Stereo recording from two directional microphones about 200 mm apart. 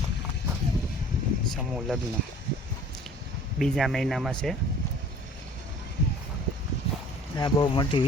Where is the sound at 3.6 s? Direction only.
Centre (ahead or behind).